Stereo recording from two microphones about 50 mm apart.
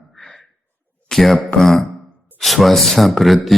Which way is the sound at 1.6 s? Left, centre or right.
Centre.